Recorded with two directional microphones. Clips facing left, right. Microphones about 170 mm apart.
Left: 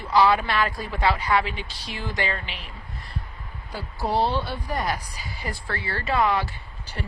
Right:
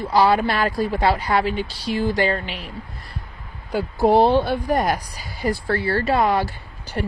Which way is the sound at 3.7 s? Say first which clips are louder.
Right 10 dB; 55° right (ahead or behind).